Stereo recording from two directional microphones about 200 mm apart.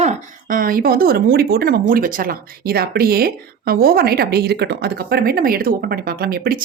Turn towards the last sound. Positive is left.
turn(degrees=-50)  # may be behind; listen again after turning